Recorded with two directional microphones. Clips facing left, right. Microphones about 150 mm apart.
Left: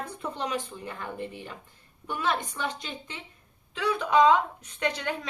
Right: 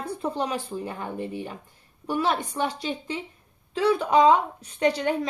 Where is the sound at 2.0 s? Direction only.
35° right (ahead or behind).